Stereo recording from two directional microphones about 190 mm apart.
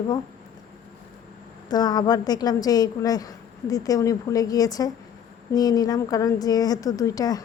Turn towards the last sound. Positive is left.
turn(degrees=20)  # may be behind; listen again after turning